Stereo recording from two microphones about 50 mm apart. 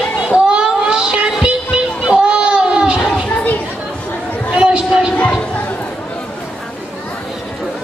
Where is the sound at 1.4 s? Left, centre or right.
Centre.